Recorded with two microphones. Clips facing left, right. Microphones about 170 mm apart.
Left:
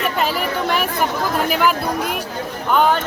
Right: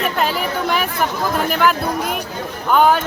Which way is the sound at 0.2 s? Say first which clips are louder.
Even; centre (ahead or behind).